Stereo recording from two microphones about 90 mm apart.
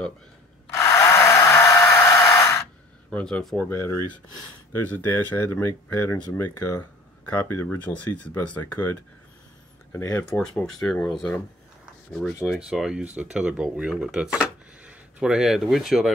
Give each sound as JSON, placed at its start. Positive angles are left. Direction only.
{"t": 0.7, "sound": "tools", "side_deg": 35}
{"t": 3.1, "sound": "speech", "side_deg": 10}
{"t": 3.6, "sound": "speech", "side_deg": 30}
{"t": 4.7, "sound": "speech", "side_deg": 20}
{"t": 7.2, "sound": "speech", "side_deg": 20}
{"t": 10.2, "sound": "speech", "side_deg": 10}
{"t": 12.5, "sound": "speech", "side_deg": -10}